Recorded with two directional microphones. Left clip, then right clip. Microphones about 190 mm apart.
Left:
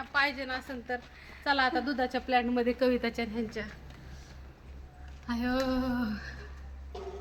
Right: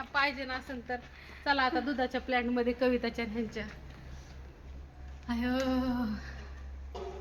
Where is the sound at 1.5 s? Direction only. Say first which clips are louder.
Left 1 dB; 20° left (ahead or behind).